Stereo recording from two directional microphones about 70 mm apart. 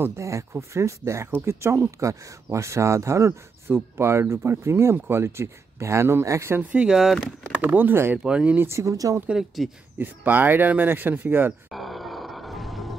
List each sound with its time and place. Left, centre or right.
0.0 s speech: right
6.5 s speech: right
6.9 s speech: centre
7.6 s speech: right
8.2 s speech: centre
8.5 s speech: right
9.3 s speech: centre
9.9 s speech: right
11.7 s grunt: centre